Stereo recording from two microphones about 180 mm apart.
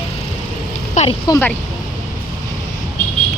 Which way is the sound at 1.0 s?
40° left (ahead or behind).